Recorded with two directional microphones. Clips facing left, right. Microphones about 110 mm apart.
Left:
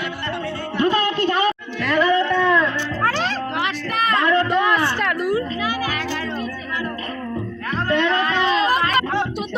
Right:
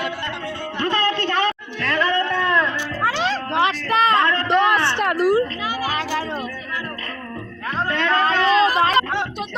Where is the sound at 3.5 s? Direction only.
30° right (ahead or behind).